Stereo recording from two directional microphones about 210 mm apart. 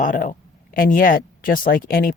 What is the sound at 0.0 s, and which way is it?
Speech, 40° left (ahead or behind).